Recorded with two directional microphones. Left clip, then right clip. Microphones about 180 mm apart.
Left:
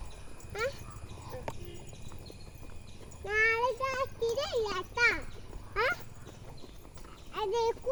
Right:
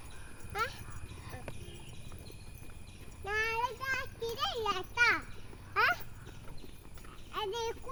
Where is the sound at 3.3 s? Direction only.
25° right (ahead or behind).